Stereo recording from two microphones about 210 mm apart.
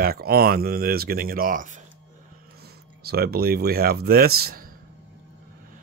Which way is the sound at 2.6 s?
50° right (ahead or behind).